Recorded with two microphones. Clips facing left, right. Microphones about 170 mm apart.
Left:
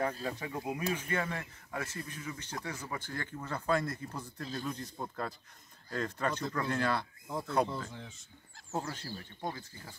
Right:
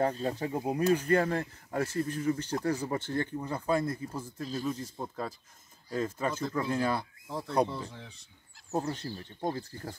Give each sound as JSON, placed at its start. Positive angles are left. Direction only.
{"t": 0.2, "sound": "speech", "side_deg": -40}
{"t": 8.7, "sound": "speech", "side_deg": -20}
{"t": 9.4, "sound": "speech", "side_deg": -40}